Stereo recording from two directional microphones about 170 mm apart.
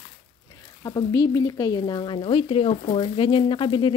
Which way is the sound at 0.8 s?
20° left (ahead or behind).